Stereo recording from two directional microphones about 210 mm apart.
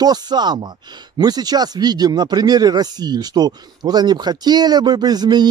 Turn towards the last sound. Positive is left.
turn(degrees=-20)  # may be behind; listen again after turning